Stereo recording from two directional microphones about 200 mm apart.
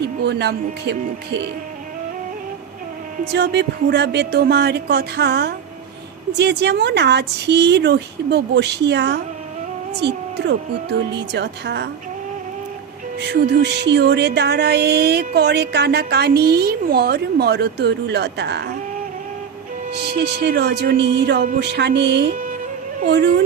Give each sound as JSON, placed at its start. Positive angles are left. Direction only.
{"t": 0.0, "sound": "music", "side_deg": -60}
{"t": 3.3, "sound": "music", "side_deg": -60}
{"t": 13.1, "sound": "music", "side_deg": -55}
{"t": 19.9, "sound": "music", "side_deg": -55}